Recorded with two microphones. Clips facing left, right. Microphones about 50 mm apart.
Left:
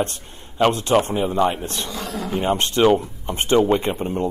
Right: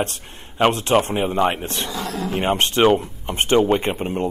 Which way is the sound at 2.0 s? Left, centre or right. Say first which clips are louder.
Right 1 dB; right.